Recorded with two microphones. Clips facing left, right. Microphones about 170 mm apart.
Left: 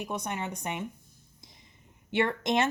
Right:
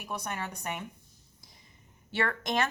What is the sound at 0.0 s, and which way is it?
Speech, 20° left (ahead or behind).